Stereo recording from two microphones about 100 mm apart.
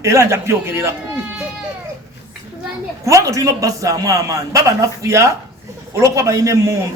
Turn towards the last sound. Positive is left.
turn(degrees=-30)  # may be behind; listen again after turning